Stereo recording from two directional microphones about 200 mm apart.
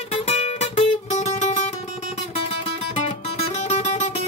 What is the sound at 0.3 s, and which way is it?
Music, 35° left (ahead or behind).